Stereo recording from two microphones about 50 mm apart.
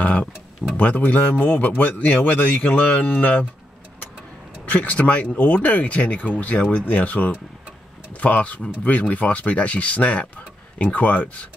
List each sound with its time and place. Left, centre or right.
0.0 s speech: left
4.7 s speech: left